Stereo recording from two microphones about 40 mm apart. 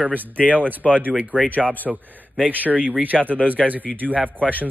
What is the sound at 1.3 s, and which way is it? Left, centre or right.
Speech, left.